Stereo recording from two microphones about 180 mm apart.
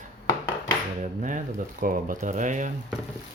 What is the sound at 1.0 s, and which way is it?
Speech, 45° right (ahead or behind).